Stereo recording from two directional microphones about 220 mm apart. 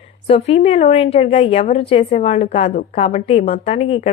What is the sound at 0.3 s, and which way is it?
A woman's voice, 25° left (ahead or behind).